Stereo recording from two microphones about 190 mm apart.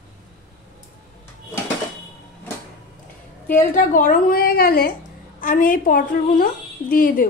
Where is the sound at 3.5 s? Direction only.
45° left (ahead or behind).